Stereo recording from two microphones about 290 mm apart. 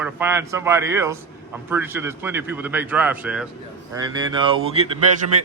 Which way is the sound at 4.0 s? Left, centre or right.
Centre.